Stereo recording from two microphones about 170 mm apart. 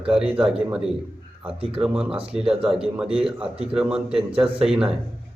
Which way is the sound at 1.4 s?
35° right (ahead or behind).